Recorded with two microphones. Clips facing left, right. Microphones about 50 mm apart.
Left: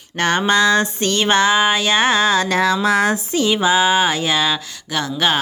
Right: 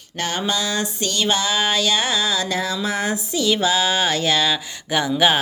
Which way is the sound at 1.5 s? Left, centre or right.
Left.